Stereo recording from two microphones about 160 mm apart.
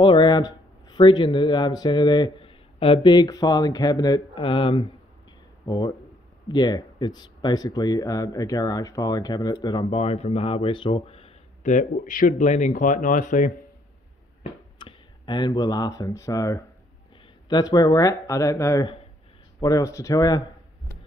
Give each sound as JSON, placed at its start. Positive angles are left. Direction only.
{"t": 0.0, "sound": "speech", "side_deg": 30}
{"t": 4.5, "sound": "speech", "side_deg": 40}
{"t": 5.7, "sound": "speech", "side_deg": 20}
{"t": 9.8, "sound": "speech", "side_deg": 40}
{"t": 11.7, "sound": "speech", "side_deg": 55}
{"t": 14.8, "sound": "speech", "side_deg": 30}